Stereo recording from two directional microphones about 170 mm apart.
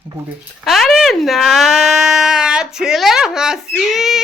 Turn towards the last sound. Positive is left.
turn(degrees=0)  # may be behind; listen again after turning